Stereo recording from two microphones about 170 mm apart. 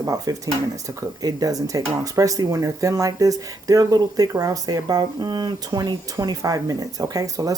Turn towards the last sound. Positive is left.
turn(degrees=-20)  # may be behind; listen again after turning